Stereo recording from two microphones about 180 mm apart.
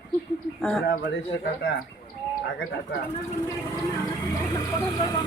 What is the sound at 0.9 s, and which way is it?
Speech, 70° left (ahead or behind).